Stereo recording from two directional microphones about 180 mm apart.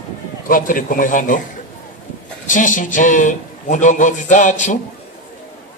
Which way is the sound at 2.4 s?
45° left (ahead or behind).